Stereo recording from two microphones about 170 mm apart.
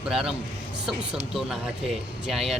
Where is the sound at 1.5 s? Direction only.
5° right (ahead or behind).